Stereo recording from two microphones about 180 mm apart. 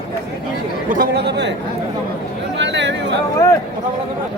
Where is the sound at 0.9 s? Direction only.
60° right (ahead or behind).